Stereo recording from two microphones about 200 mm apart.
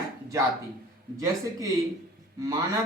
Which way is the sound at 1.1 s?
15° right (ahead or behind).